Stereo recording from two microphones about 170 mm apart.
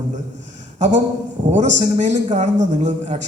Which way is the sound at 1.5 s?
45° right (ahead or behind).